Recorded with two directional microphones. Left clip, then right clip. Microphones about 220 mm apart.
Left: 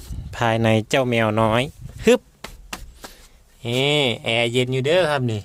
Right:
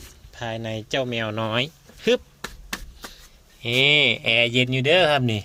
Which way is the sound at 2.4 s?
10° right (ahead or behind).